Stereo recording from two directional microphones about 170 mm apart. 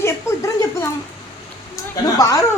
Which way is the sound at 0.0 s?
15° left (ahead or behind).